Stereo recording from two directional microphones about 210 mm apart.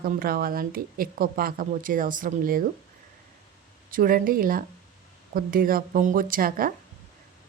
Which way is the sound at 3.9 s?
40° right (ahead or behind).